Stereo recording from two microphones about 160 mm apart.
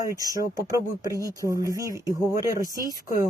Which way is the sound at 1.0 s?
20° left (ahead or behind).